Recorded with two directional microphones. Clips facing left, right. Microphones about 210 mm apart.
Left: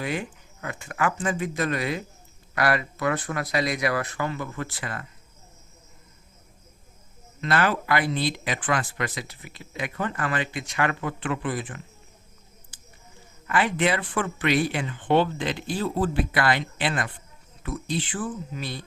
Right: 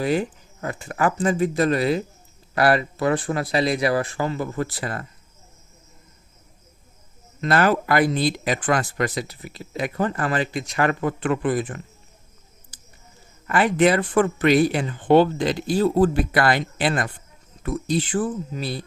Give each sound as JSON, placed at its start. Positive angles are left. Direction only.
{"t": 0.0, "sound": "speech", "side_deg": -35}
{"t": 7.4, "sound": "speech", "side_deg": -45}
{"t": 12.7, "sound": "a sound", "side_deg": -40}
{"t": 13.5, "sound": "speech", "side_deg": -45}